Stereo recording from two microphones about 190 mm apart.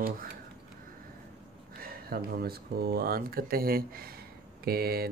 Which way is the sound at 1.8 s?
50° right (ahead or behind).